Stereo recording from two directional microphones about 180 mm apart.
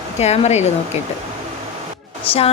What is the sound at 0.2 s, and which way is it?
Speech, 35° left (ahead or behind).